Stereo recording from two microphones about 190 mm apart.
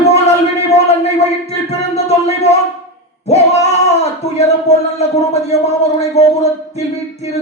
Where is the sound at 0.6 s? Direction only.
35° left (ahead or behind).